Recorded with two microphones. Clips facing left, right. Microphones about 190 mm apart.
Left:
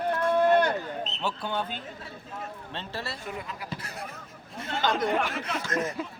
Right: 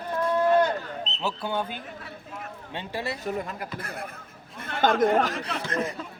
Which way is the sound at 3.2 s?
45° right (ahead or behind).